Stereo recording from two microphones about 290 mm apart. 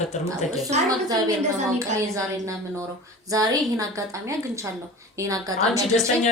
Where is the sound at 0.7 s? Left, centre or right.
Right.